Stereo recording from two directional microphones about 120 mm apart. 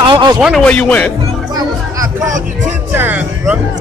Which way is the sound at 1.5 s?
30° right (ahead or behind).